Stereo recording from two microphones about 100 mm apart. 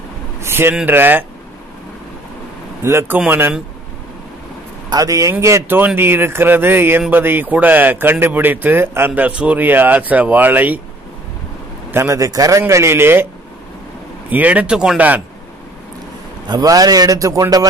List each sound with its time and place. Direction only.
0.4 s a man's voice: 25° right (ahead or behind)
2.8 s a man's voice: 25° right (ahead or behind)
4.8 s a man's voice: 35° right (ahead or behind)
5.8 s a man's voice: 20° right (ahead or behind)
11.9 s a man's voice: 30° right (ahead or behind)
14.3 s speech: 15° right (ahead or behind)
16.4 s a man's voice: 40° right (ahead or behind)